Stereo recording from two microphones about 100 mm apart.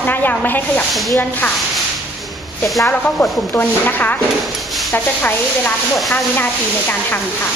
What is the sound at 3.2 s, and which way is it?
Speech, 20° left (ahead or behind).